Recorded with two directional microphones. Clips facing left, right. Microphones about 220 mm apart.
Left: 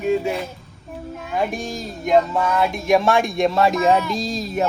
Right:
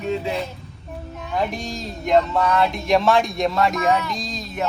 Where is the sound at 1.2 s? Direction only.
5° left (ahead or behind).